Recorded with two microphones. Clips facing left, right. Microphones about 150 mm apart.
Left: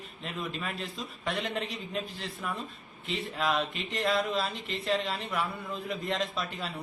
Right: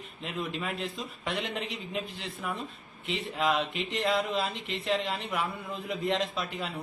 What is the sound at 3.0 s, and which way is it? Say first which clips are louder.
Speech: right 2 dB; 20° right (ahead or behind).